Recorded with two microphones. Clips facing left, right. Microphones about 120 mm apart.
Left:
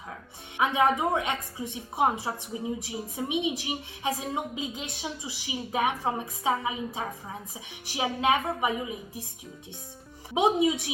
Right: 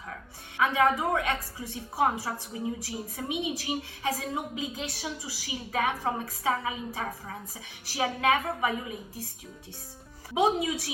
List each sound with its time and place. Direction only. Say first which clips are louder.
0.5 s a woman's voice: even; 20° left (ahead or behind)
10.3 s a woman's voice: left 2 dB; 20° left (ahead or behind)